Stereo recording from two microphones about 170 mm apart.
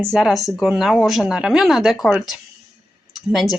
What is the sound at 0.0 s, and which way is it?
Speech, centre (ahead or behind).